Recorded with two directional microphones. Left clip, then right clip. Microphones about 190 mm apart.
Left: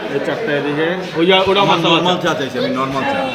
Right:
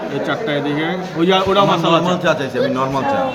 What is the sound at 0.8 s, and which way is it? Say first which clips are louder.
A man's voice: left 3 dB; 65° right (ahead or behind).